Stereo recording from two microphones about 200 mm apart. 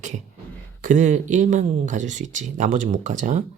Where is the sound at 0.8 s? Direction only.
40° right (ahead or behind).